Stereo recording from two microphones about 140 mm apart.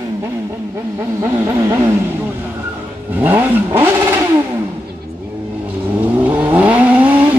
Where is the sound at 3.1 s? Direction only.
15° right (ahead or behind).